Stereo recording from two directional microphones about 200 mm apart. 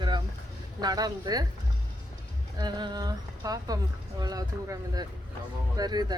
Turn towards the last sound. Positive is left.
turn(degrees=-20)  # may be behind; listen again after turning